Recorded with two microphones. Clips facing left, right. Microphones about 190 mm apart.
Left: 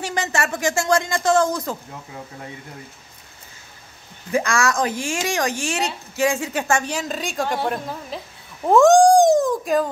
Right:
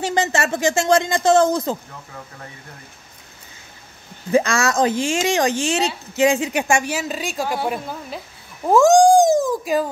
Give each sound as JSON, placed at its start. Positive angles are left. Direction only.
{"t": 0.0, "sound": "speech", "side_deg": -25}
{"t": 4.3, "sound": "a woman's voice", "side_deg": -25}